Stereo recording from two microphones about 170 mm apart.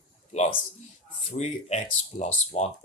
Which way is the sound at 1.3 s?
40° left (ahead or behind).